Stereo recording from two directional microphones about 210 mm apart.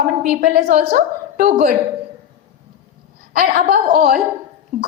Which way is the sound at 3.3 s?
40° right (ahead or behind).